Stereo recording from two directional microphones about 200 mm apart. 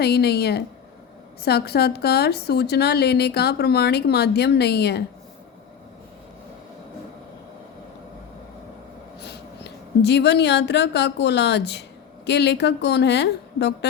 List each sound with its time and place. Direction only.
0.0 s a woman's voice: 55° left (ahead or behind)
9.2 s a woman's voice: 55° left (ahead or behind)